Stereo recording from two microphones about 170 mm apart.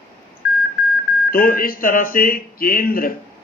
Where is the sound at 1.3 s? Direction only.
55° left (ahead or behind).